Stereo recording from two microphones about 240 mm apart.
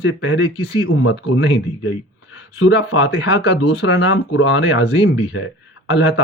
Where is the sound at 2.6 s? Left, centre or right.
Left.